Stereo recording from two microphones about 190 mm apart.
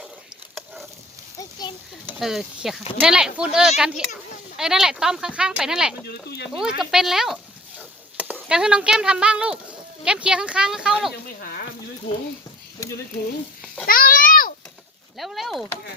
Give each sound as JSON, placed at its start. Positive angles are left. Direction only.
{"t": 1.4, "sound": "a sound", "side_deg": 20}
{"t": 2.1, "sound": "speech", "side_deg": 0}
{"t": 6.1, "sound": "speech", "side_deg": 60}
{"t": 6.5, "sound": "speech", "side_deg": 0}
{"t": 13.8, "sound": "a sound", "side_deg": 50}
{"t": 15.2, "sound": "speech", "side_deg": 0}